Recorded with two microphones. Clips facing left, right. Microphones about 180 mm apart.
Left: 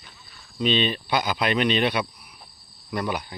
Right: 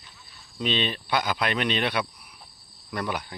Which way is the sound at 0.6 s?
5° left (ahead or behind).